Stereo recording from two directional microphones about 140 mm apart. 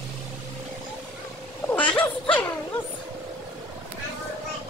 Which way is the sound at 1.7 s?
10° left (ahead or behind).